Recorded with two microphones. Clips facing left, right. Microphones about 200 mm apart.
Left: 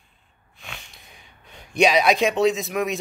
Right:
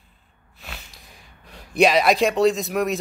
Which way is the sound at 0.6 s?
5° right (ahead or behind).